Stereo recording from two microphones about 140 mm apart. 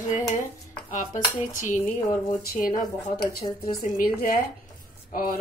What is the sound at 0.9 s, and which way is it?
Speech, 65° left (ahead or behind).